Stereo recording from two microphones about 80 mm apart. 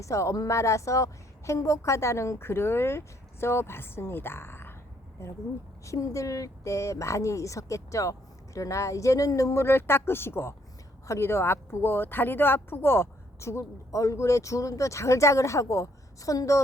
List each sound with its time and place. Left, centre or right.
0.0 s speech: left
5.8 s speech: left